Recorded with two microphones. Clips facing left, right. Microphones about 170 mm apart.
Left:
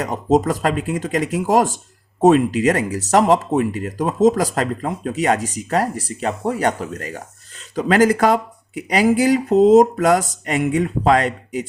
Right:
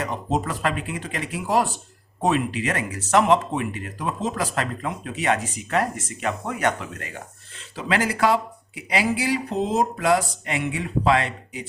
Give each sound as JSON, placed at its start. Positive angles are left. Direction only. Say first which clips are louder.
{"t": 0.0, "sound": "speech", "louder": "left 8 dB", "side_deg": 40}